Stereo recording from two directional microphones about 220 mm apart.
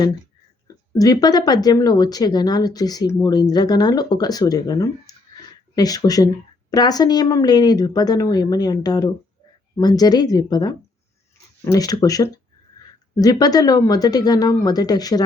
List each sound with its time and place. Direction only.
0.9 s speech: 15° left (ahead or behind)